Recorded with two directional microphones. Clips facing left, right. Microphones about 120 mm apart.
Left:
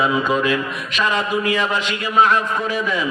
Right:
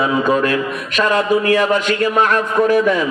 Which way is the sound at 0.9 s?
50° right (ahead or behind).